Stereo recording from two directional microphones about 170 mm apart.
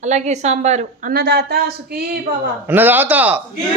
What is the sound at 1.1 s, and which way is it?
Speech, 70° right (ahead or behind).